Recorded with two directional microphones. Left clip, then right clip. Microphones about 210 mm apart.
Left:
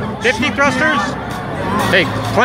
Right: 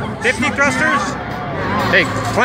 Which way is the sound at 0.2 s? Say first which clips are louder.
Left 1 dB; 10° left (ahead or behind).